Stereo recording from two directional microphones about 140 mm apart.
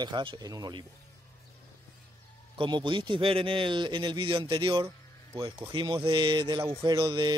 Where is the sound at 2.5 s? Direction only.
35° right (ahead or behind).